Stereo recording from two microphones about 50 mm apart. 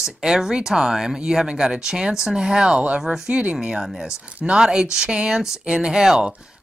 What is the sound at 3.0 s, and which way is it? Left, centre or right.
Speech, centre.